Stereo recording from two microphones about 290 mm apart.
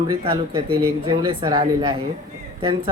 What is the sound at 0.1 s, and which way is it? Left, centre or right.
Speech, centre.